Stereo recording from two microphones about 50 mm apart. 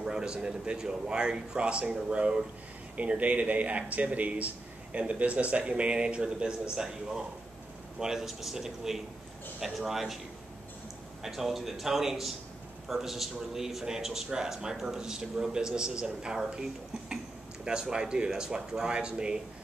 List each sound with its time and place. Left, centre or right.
0.0 s a man's voice: centre
11.2 s a man's voice: centre
17.6 s a man's voice: centre